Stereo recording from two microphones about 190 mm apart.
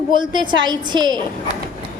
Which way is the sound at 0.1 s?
25° right (ahead or behind).